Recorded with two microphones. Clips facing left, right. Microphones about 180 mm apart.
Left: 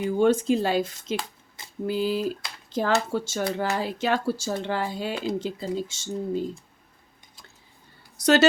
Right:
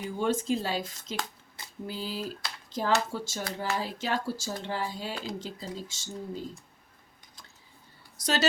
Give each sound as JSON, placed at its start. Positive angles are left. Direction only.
{"t": 0.2, "sound": "speech", "side_deg": 65}
{"t": 8.2, "sound": "speech", "side_deg": 65}